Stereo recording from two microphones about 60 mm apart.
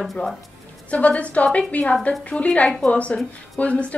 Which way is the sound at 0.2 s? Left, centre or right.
Left.